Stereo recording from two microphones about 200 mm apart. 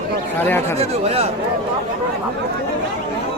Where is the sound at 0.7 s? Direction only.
30° right (ahead or behind).